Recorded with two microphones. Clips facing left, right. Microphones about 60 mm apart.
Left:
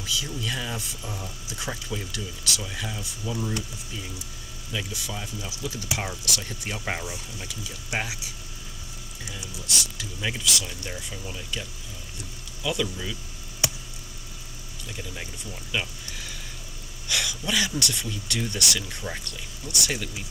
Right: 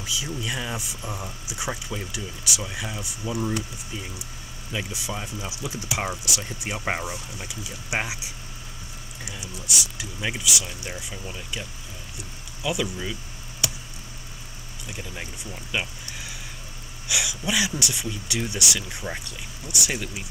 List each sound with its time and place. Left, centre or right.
0.0 s speech: centre
9.4 s speech: centre
12.6 s speech: centre
14.9 s speech: centre